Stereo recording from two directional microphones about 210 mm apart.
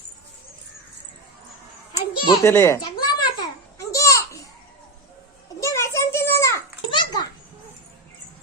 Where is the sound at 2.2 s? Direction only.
15° left (ahead or behind).